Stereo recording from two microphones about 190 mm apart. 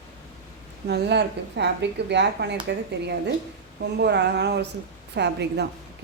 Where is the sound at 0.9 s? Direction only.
60° right (ahead or behind).